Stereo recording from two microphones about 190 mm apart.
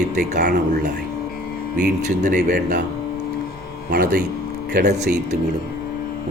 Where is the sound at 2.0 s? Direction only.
40° right (ahead or behind).